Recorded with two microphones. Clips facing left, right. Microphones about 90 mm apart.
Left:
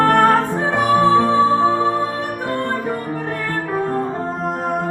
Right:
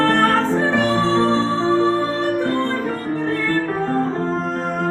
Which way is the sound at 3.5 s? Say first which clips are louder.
Right 1 dB; 10° left (ahead or behind).